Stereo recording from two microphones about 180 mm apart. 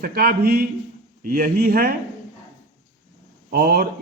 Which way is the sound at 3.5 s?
55° right (ahead or behind).